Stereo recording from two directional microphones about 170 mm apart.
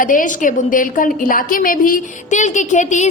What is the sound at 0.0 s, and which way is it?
A woman's voice, 50° left (ahead or behind).